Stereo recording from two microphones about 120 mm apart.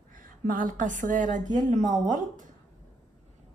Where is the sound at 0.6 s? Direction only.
90° right.